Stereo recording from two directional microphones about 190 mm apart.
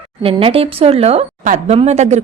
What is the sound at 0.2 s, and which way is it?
Speech, 30° right (ahead or behind).